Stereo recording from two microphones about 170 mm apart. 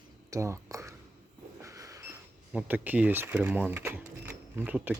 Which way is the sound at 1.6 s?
20° right (ahead or behind).